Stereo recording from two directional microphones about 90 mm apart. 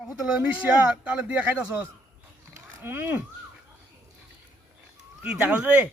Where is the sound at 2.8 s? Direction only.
25° right (ahead or behind).